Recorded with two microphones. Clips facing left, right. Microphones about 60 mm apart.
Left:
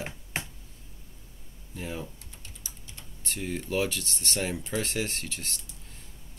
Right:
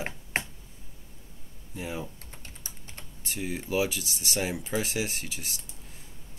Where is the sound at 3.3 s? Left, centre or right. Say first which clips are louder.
Even; centre.